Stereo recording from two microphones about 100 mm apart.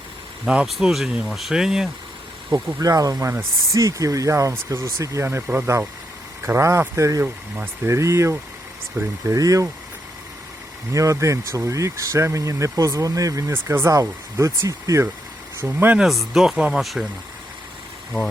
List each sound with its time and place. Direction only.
0.4 s speech: 5° right (ahead or behind)
2.5 s speech: 30° right (ahead or behind)
10.9 s speech: 30° right (ahead or behind)
15.6 s speech: 20° right (ahead or behind)
16.0 s speech: centre (ahead or behind)